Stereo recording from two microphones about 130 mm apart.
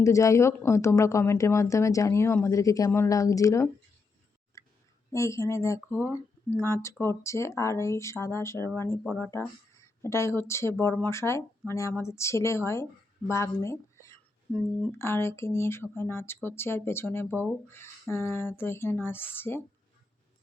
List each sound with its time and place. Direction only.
0.0 s a woman's voice: 25° left (ahead or behind)
4.6 s a sound: 25° left (ahead or behind)
5.1 s a woman's voice: 25° left (ahead or behind)
14.5 s a woman's voice: 10° left (ahead or behind)